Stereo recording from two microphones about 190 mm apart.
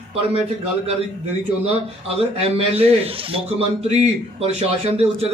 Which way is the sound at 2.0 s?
30° right (ahead or behind).